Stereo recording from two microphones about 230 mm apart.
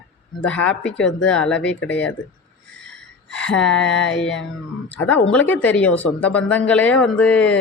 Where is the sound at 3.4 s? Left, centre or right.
Left.